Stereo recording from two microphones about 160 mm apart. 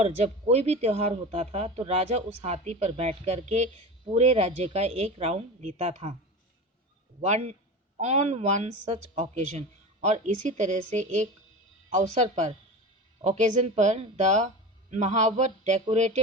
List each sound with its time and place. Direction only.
0.0 s speech: 40° right (ahead or behind)
7.2 s speech: 45° right (ahead or behind)